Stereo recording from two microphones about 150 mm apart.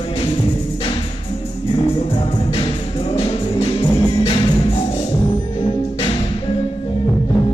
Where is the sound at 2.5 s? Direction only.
40° left (ahead or behind).